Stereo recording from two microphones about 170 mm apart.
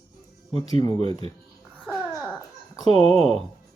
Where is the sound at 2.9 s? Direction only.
35° right (ahead or behind).